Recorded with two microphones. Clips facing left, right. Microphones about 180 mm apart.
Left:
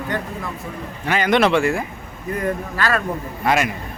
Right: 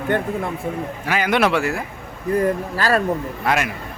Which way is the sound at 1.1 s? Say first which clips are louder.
Left 2 dB; 10° right (ahead or behind).